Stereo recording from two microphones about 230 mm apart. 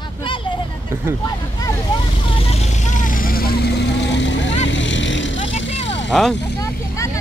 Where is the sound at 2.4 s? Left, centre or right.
Left.